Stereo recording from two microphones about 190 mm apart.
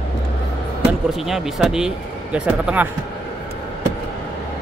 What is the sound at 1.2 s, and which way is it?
Speech, centre (ahead or behind).